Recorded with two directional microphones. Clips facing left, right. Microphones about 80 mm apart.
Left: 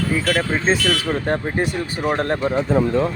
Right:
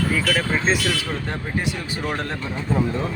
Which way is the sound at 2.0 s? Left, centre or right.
Left.